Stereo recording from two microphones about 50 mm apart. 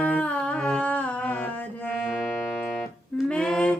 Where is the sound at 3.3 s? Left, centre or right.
Centre.